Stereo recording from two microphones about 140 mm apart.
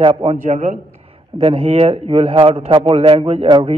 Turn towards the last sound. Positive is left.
turn(degrees=-45)  # may be behind; listen again after turning